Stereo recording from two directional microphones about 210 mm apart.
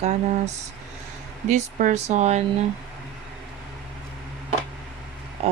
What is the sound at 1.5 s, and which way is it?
Speech, 35° right (ahead or behind).